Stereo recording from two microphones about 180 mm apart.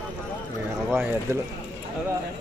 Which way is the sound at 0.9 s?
10° right (ahead or behind).